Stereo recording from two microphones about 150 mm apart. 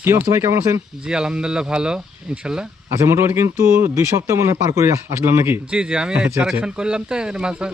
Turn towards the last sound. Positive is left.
turn(degrees=-5)  # may be behind; listen again after turning